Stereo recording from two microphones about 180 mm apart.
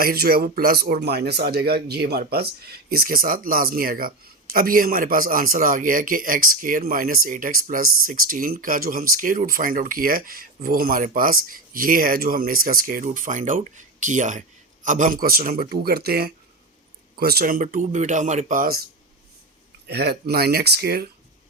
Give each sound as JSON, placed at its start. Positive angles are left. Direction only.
{"t": 0.0, "sound": "speech", "side_deg": -55}
{"t": 19.9, "sound": "speech", "side_deg": -65}